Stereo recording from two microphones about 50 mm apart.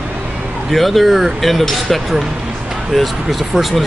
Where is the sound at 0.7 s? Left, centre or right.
Centre.